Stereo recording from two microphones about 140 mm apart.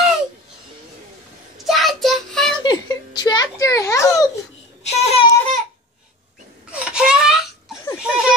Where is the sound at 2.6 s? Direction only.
30° left (ahead or behind).